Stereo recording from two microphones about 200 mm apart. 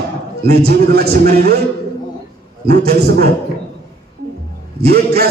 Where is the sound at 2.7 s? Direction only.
50° right (ahead or behind).